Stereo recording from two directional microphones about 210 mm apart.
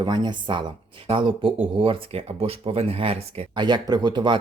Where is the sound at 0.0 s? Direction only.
20° right (ahead or behind).